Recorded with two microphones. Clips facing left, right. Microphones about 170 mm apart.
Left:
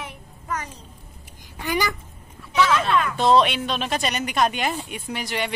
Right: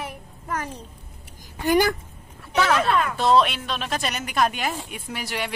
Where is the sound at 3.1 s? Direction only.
Centre (ahead or behind).